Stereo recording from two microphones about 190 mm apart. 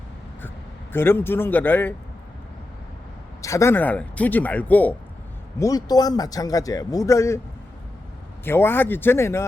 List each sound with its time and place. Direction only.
0.9 s speech: 10° left (ahead or behind)
3.4 s speech: 15° left (ahead or behind)
5.5 s a man's voice: 20° left (ahead or behind)
8.4 s speech: 10° left (ahead or behind)